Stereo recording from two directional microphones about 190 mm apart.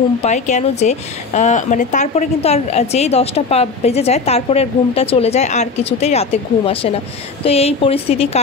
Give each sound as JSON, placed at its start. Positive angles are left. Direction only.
{"t": 0.2, "sound": "a woman's voice", "side_deg": 40}